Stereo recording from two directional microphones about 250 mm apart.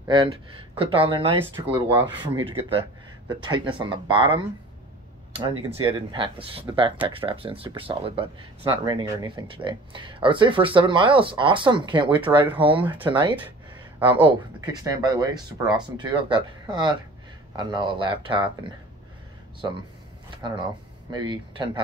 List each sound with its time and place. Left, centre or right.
0.7 s speech: right
12.8 s speech: centre
21.1 s speech: centre